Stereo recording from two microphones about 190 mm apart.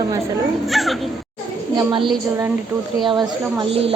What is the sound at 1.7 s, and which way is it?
A woman's voice, 25° right (ahead or behind).